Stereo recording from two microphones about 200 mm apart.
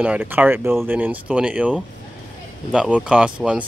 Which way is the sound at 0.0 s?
10° right (ahead or behind).